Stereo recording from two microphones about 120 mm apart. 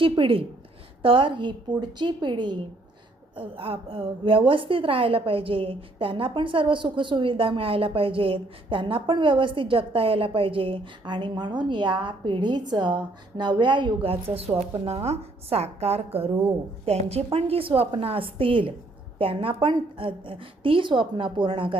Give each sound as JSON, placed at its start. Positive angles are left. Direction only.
{"t": 0.0, "sound": "a woman's voice", "side_deg": -50}